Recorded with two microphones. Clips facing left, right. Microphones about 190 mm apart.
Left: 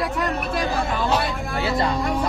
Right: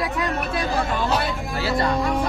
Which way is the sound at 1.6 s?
25° left (ahead or behind).